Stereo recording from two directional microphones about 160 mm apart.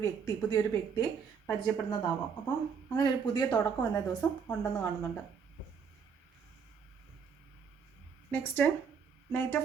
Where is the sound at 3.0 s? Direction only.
25° left (ahead or behind).